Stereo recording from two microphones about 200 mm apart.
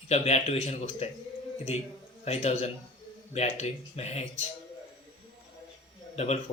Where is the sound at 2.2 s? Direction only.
35° left (ahead or behind).